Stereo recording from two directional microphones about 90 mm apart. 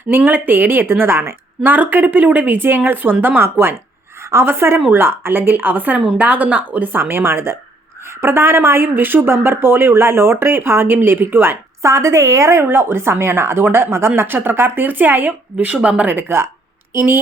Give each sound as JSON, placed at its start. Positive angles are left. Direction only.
{"t": 0.1, "sound": "speech", "side_deg": -20}